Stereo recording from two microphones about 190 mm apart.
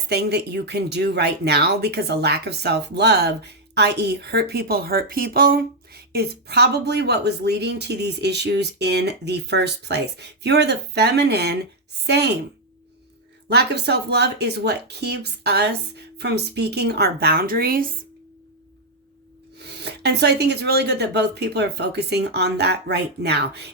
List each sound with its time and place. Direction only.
0.1 s speech: 60° right (ahead or behind)
13.5 s speech: 60° right (ahead or behind)
19.5 s speech: 60° right (ahead or behind)